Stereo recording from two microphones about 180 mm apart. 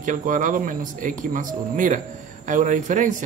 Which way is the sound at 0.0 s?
45° right (ahead or behind).